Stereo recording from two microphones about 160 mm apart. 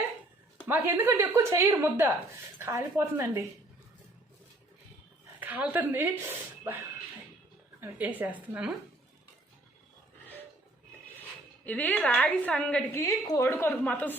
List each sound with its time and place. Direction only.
0.7 s a woman's voice: 15° right (ahead or behind)
5.4 s speech: 10° right (ahead or behind)
7.8 s a woman's voice: 10° right (ahead or behind)
11.2 s a woman's voice: 10° left (ahead or behind)